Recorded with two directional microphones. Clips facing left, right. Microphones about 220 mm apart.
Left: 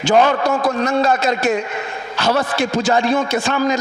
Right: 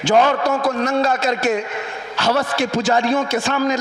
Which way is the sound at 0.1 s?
15° left (ahead or behind).